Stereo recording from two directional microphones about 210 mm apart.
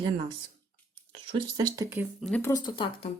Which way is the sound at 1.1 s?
25° right (ahead or behind).